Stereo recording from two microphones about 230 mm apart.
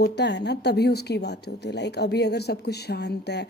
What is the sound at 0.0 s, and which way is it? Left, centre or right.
Speech, left.